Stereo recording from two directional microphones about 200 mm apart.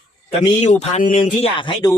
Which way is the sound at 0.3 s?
30° left (ahead or behind).